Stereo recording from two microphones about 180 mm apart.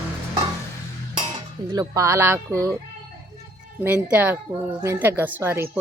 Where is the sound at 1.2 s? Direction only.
25° right (ahead or behind).